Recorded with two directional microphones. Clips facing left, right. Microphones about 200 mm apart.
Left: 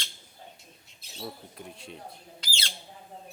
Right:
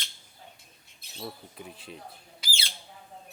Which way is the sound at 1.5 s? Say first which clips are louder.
Even; centre (ahead or behind).